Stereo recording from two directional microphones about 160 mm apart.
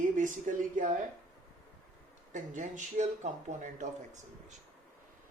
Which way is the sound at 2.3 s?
50° right (ahead or behind).